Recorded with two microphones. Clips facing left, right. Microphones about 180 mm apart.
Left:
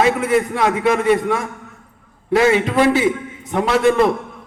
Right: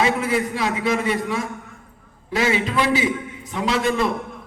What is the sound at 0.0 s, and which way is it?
A man's voice, 55° left (ahead or behind).